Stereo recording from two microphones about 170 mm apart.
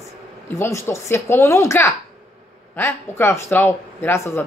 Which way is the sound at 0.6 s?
15° left (ahead or behind).